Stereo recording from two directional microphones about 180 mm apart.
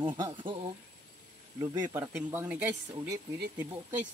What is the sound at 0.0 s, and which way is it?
Speech, 25° right (ahead or behind).